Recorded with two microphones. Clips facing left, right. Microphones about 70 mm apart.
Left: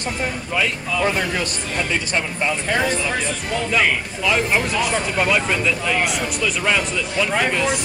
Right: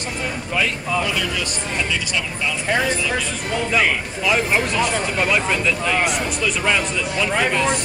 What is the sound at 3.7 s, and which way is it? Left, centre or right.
Speech, centre.